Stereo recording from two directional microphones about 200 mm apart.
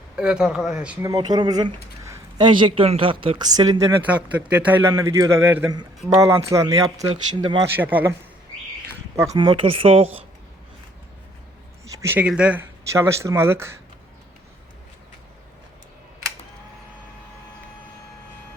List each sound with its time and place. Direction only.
0.2 s speech: 5° right (ahead or behind)
1.0 s speech: 20° right (ahead or behind)
4.1 s speech: 5° right (ahead or behind)
7.8 s speech: 10° right (ahead or behind)
9.1 s speech: 15° right (ahead or behind)
11.9 s speech: 15° right (ahead or behind)